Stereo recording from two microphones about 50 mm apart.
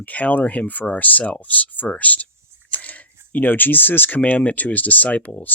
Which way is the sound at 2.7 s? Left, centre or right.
Left.